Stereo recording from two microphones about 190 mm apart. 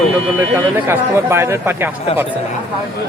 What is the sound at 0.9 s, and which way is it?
Speech, 15° right (ahead or behind).